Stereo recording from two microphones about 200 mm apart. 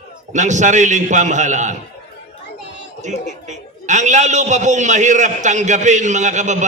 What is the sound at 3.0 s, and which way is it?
A man's voice, 35° right (ahead or behind).